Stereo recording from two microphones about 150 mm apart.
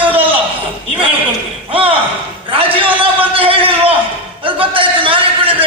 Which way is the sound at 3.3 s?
40° right (ahead or behind).